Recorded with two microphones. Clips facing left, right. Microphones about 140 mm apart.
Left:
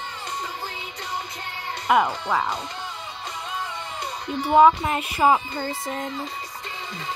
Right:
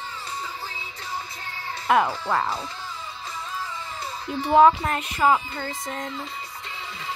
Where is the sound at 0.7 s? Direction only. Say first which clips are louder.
Left 2 dB; 65° left (ahead or behind).